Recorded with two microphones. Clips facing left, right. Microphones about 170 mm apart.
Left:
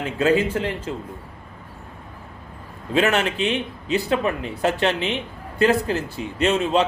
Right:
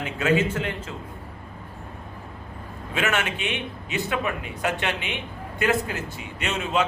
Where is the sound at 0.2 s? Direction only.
35° left (ahead or behind).